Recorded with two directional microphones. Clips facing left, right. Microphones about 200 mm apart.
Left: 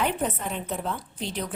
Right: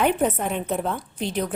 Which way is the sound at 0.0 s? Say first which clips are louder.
Right 6 dB; 55° right (ahead or behind).